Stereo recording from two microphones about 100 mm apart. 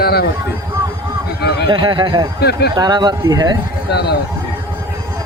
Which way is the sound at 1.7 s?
55° right (ahead or behind).